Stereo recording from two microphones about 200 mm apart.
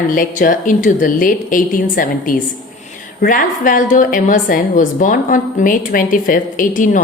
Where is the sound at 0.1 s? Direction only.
40° left (ahead or behind).